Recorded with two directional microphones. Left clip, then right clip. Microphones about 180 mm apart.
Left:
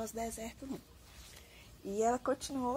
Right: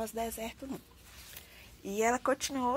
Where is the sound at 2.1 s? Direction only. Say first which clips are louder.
Right 4 dB; 20° right (ahead or behind).